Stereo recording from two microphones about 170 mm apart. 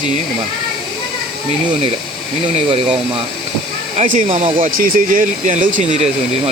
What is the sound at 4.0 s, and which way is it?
Speech, 50° right (ahead or behind).